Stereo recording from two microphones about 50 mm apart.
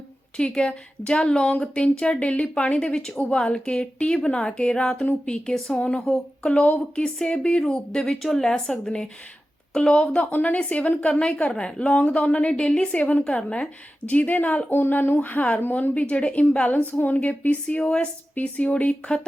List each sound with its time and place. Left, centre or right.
0.3 s a woman's voice: centre
6.0 s speech: centre
6.4 s a woman's voice: left
13.0 s a woman's voice: left
14.1 s a woman's voice: left
17.7 s a woman's voice: left
18.3 s a woman's voice: left